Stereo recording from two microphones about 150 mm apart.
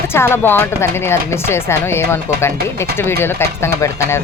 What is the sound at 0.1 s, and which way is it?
Speech, 15° left (ahead or behind).